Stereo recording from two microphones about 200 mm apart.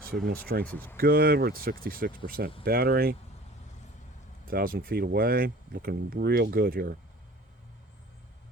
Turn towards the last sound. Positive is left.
turn(degrees=-50)  # may be behind; listen again after turning